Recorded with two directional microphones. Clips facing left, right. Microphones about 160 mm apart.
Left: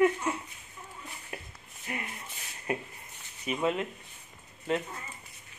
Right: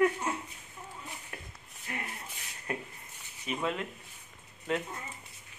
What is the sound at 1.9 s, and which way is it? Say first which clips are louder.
Speech: left 2 dB; 20° left (ahead or behind).